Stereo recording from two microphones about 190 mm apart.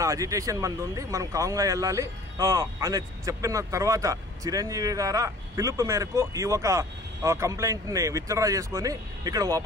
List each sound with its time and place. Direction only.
0.0 s speech: 15° right (ahead or behind)